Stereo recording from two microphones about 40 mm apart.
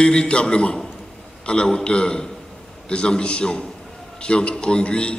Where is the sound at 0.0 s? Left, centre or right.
Left.